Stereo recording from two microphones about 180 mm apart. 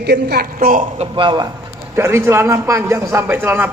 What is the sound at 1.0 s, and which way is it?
A man's voice, 25° right (ahead or behind).